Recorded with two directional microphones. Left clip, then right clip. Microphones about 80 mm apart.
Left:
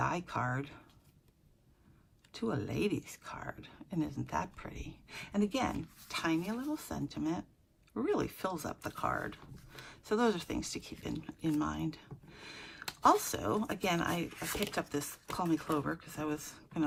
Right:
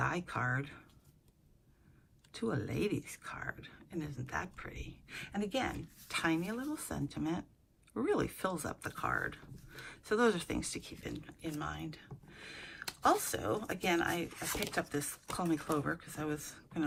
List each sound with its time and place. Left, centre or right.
0.0 s speech: left
2.3 s speech: centre; by 5.7 s left
6.1 s speech: centre
9.1 s speech: centre
10.8 s speech: left
14.3 s speech: right
14.8 s speech: left